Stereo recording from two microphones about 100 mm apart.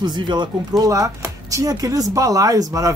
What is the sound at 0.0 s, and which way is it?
Speech, 50° right (ahead or behind).